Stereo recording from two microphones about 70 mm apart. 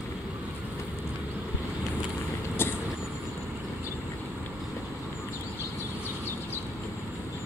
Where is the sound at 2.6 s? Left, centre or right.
Left.